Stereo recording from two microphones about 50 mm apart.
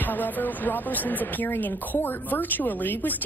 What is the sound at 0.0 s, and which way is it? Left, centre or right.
Speech, left.